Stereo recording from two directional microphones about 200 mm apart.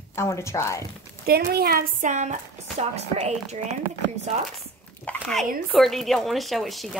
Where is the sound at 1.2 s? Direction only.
50° right (ahead or behind); by 3.8 s 35° right (ahead or behind).